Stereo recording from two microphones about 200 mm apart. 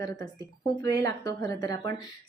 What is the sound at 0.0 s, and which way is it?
A woman's voice, 20° left (ahead or behind).